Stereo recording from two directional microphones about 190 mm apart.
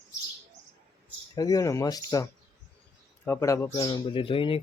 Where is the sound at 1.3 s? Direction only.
20° left (ahead or behind).